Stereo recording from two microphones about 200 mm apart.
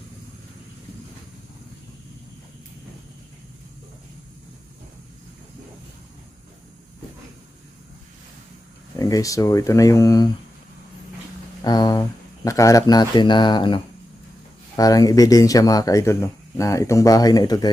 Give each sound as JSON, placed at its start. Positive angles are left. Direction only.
{"t": 9.0, "sound": "speech", "side_deg": 15}
{"t": 11.6, "sound": "a sound", "side_deg": 20}
{"t": 12.5, "sound": "speech", "side_deg": 15}